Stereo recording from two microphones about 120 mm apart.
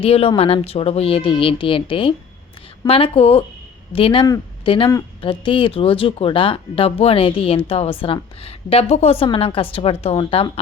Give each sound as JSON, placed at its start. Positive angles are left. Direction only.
{"t": 0.0, "sound": "speech", "side_deg": 55}